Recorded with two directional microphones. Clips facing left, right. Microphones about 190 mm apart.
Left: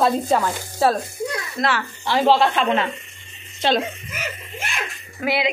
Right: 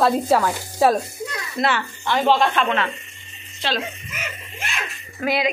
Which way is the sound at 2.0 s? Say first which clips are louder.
Left 2 dB; 30° left (ahead or behind).